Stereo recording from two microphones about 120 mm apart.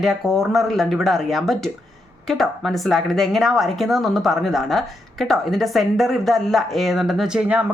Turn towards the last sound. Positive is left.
turn(degrees=-10)  # may be behind; listen again after turning